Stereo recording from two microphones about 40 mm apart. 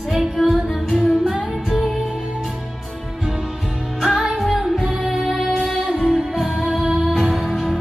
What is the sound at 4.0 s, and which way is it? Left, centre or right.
Music, centre.